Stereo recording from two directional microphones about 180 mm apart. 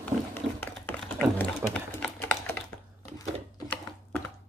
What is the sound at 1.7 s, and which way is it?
Typing, 5° left (ahead or behind).